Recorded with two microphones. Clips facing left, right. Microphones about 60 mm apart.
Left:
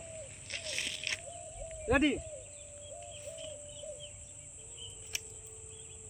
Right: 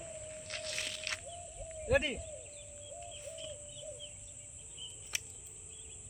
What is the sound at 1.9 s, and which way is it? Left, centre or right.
Speech, centre.